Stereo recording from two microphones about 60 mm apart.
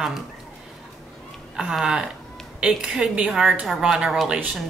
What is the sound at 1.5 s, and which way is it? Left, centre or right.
Speech, centre.